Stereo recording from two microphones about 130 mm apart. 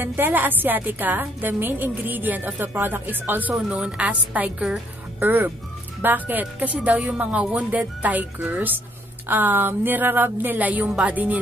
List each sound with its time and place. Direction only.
0.0 s speech: 15° right (ahead or behind)